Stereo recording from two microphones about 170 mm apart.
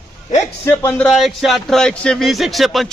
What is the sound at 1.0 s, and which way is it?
Speech, centre (ahead or behind).